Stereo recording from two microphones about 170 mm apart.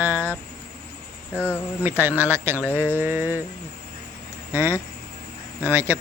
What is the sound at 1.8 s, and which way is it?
Speech, 10° right (ahead or behind).